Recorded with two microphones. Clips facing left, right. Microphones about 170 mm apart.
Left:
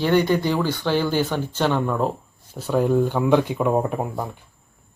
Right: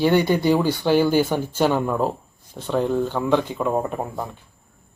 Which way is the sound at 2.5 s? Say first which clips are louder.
Left 2 dB; 10° left (ahead or behind).